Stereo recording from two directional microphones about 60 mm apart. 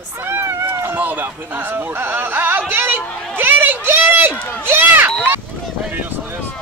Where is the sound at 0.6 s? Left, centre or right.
Right.